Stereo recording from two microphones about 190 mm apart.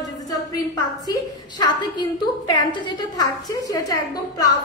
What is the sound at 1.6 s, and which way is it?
A woman's voice, 20° left (ahead or behind).